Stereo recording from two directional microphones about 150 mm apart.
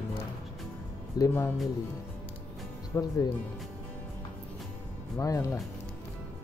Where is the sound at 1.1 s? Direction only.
25° left (ahead or behind).